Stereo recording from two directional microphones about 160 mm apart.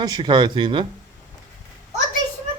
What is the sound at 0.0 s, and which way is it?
Speech, 25° right (ahead or behind).